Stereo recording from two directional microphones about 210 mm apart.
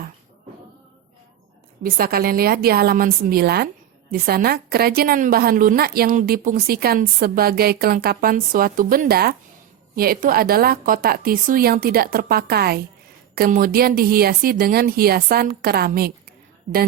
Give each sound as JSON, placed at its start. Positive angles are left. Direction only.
{"t": 1.8, "sound": "a woman's voice", "side_deg": -45}